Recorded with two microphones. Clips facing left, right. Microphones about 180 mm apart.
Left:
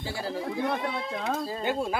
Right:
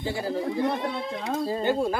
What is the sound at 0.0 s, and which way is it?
Speech, centre (ahead or behind).